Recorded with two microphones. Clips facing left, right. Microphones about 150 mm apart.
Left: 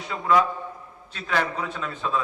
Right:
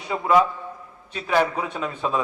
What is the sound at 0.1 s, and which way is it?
A man's voice, 20° right (ahead or behind).